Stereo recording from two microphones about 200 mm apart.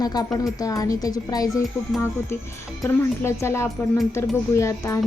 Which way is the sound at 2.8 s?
15° left (ahead or behind).